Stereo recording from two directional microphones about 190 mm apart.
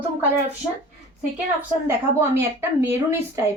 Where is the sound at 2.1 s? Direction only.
15° right (ahead or behind).